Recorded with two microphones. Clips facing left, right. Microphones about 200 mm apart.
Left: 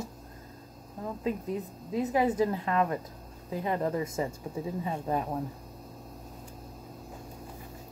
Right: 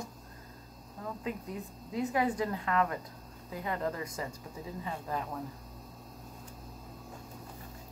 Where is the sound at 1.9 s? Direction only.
20° left (ahead or behind).